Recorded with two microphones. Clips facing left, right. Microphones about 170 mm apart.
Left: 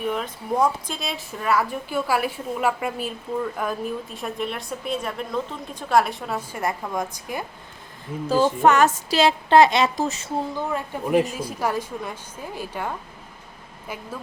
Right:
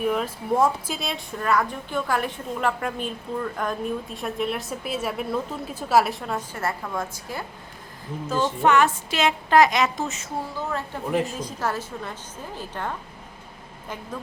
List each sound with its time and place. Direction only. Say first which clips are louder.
0.0 s a woman's voice: right 2 dB; 5° right (ahead or behind)
6.6 s a woman's voice: left 5 dB; 15° left (ahead or behind)
8.3 s a woman's voice: left 3 dB; 40° left (ahead or behind)
10.7 s a woman's voice: left 3 dB; 15° left (ahead or behind)